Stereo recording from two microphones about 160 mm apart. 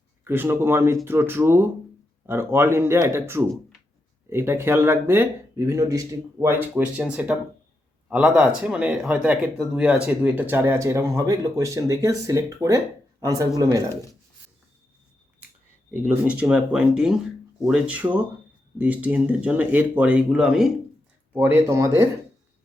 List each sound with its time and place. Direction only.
0.3 s speech: 15° right (ahead or behind)
16.0 s speech: 10° right (ahead or behind)
21.3 s speech: 15° right (ahead or behind)